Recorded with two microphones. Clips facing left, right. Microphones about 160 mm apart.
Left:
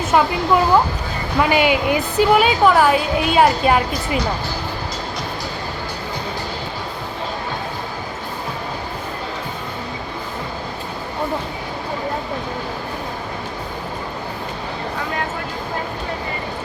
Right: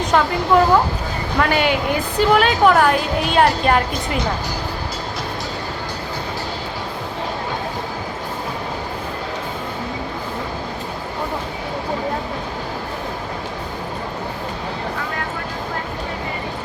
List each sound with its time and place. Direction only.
0.0 s a woman's voice: 5° left (ahead or behind)